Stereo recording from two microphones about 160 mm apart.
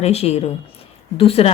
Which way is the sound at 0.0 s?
40° left (ahead or behind).